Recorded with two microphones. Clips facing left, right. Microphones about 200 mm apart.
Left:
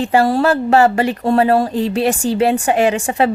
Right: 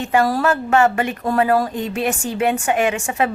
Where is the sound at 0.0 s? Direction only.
30° left (ahead or behind).